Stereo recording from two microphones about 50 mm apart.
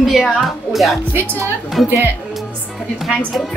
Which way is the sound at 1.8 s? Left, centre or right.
Centre.